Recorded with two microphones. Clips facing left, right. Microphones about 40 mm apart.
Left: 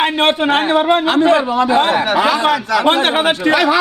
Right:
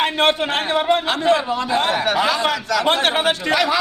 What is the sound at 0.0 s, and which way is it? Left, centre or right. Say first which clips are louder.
A man's voice: left 4 dB; centre.